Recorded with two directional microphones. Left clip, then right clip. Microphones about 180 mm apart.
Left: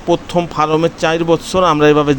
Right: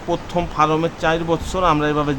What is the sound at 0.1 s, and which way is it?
Speech, 30° left (ahead or behind).